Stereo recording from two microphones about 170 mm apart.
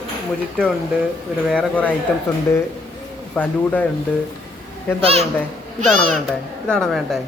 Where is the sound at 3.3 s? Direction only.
10° left (ahead or behind).